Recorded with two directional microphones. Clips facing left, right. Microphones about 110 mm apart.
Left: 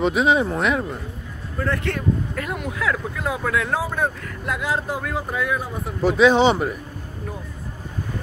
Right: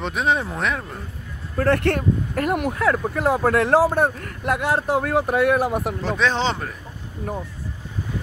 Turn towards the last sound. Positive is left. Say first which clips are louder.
# left 6 dB
turn(degrees=10)  # may be behind; listen again after turning